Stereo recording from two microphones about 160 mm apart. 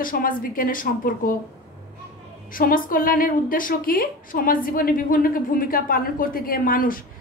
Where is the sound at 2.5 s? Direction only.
60° left (ahead or behind).